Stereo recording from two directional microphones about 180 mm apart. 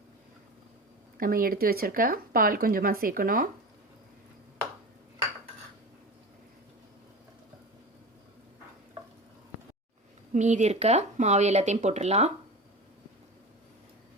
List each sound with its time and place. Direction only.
1.2 s speech: 55° right (ahead or behind)
10.3 s speech: 40° right (ahead or behind)